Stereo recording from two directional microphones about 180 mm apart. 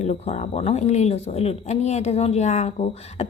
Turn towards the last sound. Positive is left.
turn(degrees=35)  # may be behind; listen again after turning